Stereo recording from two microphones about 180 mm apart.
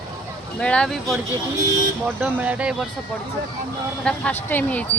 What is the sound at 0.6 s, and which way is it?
Speech, 5° left (ahead or behind).